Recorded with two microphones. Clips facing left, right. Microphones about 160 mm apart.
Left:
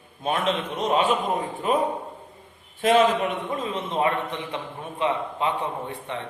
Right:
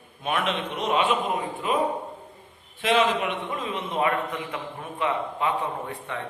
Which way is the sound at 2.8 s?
45° left (ahead or behind).